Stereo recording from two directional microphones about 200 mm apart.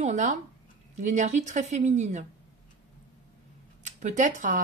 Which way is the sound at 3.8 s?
35° right (ahead or behind).